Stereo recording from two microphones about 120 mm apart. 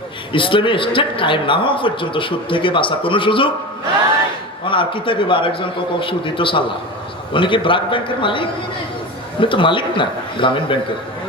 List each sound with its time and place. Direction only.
0.3 s a man's voice: 45° left (ahead or behind)
4.6 s a man's voice: 45° left (ahead or behind)